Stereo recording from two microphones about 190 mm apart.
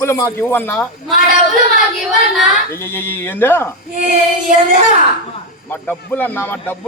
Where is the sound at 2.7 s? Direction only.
10° left (ahead or behind).